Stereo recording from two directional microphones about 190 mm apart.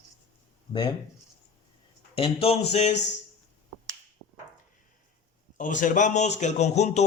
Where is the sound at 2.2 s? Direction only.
30° left (ahead or behind).